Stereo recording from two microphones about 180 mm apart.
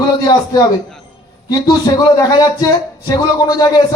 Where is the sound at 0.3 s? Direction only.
20° left (ahead or behind).